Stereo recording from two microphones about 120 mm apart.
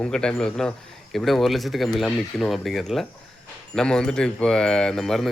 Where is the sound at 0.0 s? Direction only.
5° left (ahead or behind).